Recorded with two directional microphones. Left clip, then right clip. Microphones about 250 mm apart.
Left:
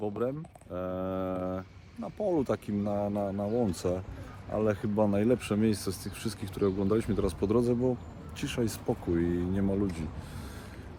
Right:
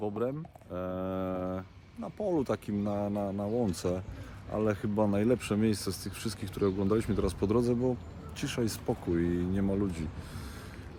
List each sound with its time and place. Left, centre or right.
0.0 s speech: centre